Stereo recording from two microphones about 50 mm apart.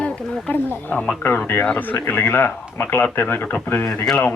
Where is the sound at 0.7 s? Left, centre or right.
Left.